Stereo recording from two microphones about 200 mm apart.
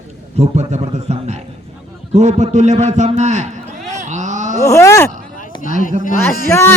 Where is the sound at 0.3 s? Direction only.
35° right (ahead or behind).